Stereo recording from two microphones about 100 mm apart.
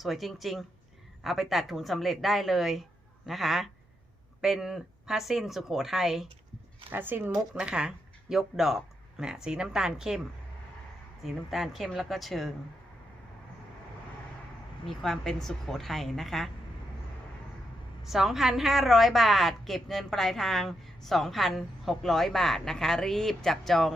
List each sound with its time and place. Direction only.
0.0 s a woman's voice: centre (ahead or behind)
6.9 s speech: 20° right (ahead or behind)
11.2 s a woman's voice: centre (ahead or behind)
14.8 s a woman's voice: 5° left (ahead or behind)
18.1 s a woman's voice: 5° right (ahead or behind)